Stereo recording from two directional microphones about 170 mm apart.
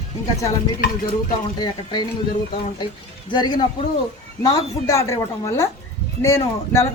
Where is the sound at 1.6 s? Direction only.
25° left (ahead or behind).